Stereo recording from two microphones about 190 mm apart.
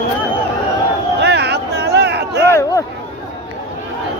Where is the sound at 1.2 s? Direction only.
60° right (ahead or behind).